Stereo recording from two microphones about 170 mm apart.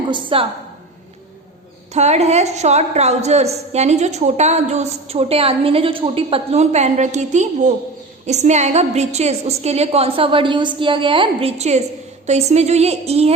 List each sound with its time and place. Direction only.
0.1 s a woman's voice: 30° right (ahead or behind)
1.9 s a woman's voice: 40° right (ahead or behind)